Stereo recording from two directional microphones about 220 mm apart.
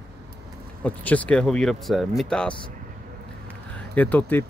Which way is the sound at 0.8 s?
5° left (ahead or behind).